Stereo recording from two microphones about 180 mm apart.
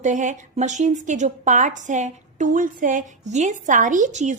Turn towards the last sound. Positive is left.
turn(degrees=-40)  # may be behind; listen again after turning